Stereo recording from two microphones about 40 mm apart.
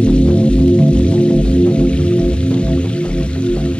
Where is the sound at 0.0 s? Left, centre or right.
Left.